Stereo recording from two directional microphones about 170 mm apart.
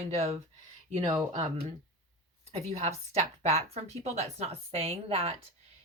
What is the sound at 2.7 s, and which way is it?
Speech, 40° right (ahead or behind).